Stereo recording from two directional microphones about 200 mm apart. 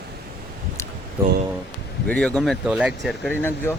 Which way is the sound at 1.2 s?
15° right (ahead or behind).